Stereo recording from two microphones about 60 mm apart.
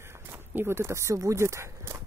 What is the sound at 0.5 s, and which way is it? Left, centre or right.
Speech, right.